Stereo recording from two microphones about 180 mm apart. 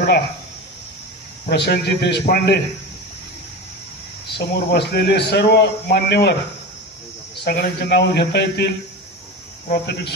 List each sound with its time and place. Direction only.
1.5 s a man's voice: 65° left (ahead or behind)
4.4 s a man's voice: 65° left (ahead or behind)
7.4 s speech: 60° left (ahead or behind)